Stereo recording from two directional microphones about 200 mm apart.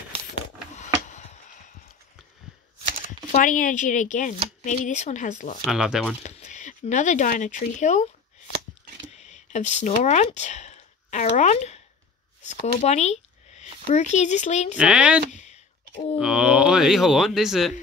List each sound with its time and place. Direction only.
0.7 s a sound: 35° left (ahead or behind)
3.3 s speech: 40° left (ahead or behind)
5.7 s speech: 5° right (ahead or behind)
6.2 s speech: 35° left (ahead or behind)
9.1 s a sound: 35° left (ahead or behind)
12.4 s speech: 35° left (ahead or behind)
14.8 s speech: 5° right (ahead or behind)
16.2 s speech: 5° right (ahead or behind)